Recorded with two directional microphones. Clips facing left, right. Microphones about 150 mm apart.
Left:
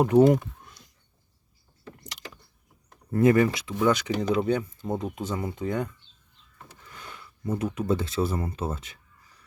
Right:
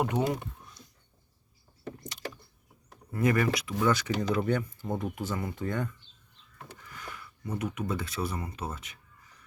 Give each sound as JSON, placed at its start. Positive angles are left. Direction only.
{"t": 0.0, "sound": "speech", "side_deg": 35}
{"t": 3.2, "sound": "speech", "side_deg": 30}